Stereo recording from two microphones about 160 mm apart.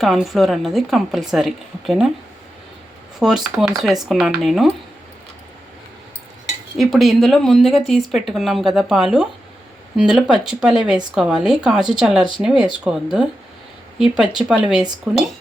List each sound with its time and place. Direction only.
0.0 s speech: centre (ahead or behind)
3.2 s speech: 5° right (ahead or behind)
6.4 s speech: centre (ahead or behind)